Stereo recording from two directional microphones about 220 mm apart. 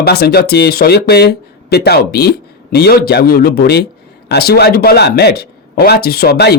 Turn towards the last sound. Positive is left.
turn(degrees=45)  # may be behind; listen again after turning